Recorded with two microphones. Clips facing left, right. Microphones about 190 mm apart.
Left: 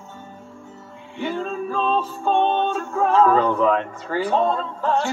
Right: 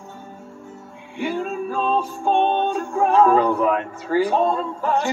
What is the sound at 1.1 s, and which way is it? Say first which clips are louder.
Music: right 1 dB; 10° right (ahead or behind).